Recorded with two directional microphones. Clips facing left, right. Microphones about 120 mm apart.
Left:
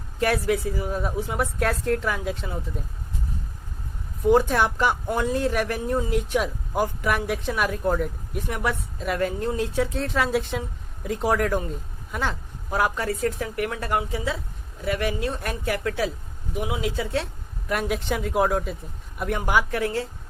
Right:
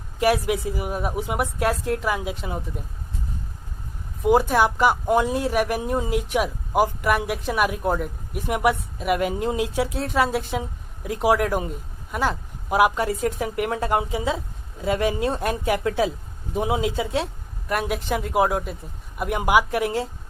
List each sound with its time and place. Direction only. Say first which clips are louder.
0.2 s speech: right 2 dB; 10° right (ahead or behind)
4.2 s a woman's voice: right 1 dB; 10° right (ahead or behind)
17.7 s speech: right 1 dB; centre (ahead or behind)